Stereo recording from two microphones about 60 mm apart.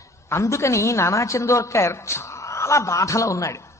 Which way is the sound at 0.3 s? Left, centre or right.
Left.